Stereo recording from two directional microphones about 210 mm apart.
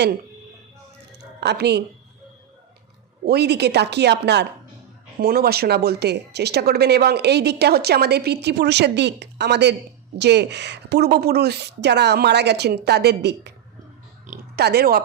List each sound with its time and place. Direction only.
1.4 s a woman's voice: 50° right (ahead or behind)
3.2 s speech: 50° right (ahead or behind)